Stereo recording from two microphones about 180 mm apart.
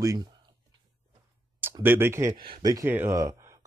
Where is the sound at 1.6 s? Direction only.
10° right (ahead or behind).